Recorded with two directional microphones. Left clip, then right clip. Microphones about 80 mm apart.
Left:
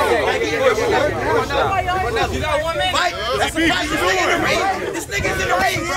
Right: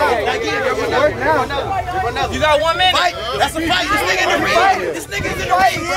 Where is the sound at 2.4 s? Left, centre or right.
Centre.